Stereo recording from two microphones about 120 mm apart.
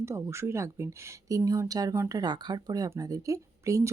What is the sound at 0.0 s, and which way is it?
Speech, 25° right (ahead or behind).